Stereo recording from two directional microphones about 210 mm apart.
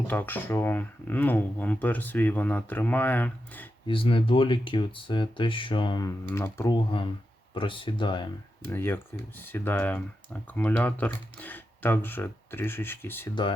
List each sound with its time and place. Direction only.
0.1 s speech: 10° left (ahead or behind)
3.8 s speech: 25° left (ahead or behind)
7.5 s speech: 25° left (ahead or behind)
8.7 s speech: 10° left (ahead or behind)
13.3 s speech: 25° left (ahead or behind)